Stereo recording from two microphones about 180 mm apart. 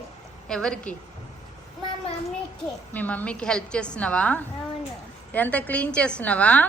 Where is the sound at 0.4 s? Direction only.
5° left (ahead or behind).